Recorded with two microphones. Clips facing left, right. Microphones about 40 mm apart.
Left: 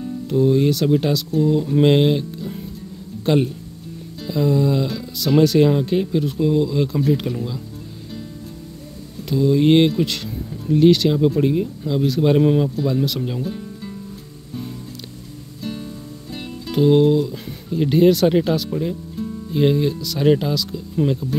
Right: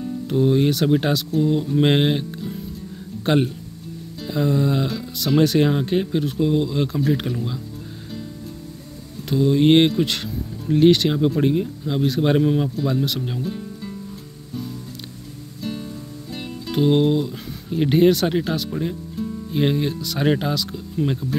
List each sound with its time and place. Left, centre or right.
0.3 s speech: right
1.8 s speech: right
4.3 s speech: centre
4.8 s speech: centre
9.3 s speech: right
12.5 s speech: centre
13.4 s music: centre
15.6 s music: centre
16.8 s speech: centre
18.1 s speech: centre
19.5 s speech: centre